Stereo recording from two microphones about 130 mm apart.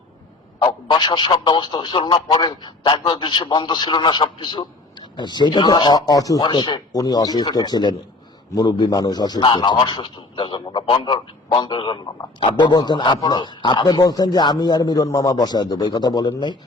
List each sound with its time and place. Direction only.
0.6 s speech: 35° left (ahead or behind)